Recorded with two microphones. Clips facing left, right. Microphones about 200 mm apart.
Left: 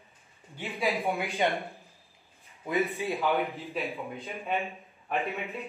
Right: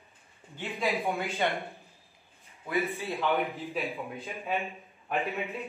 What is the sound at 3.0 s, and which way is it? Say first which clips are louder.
Speech: left 2 dB; 15° left (ahead or behind).